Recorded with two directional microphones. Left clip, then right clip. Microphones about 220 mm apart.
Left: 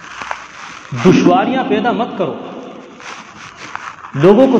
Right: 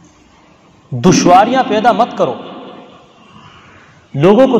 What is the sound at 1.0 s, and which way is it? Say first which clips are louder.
A man's voice: right 3 dB; 55° right (ahead or behind).